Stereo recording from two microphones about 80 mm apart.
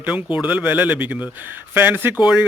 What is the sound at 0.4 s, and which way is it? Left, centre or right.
Speech, centre.